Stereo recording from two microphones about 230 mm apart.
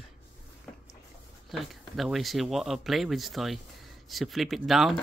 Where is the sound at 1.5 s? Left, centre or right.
Centre.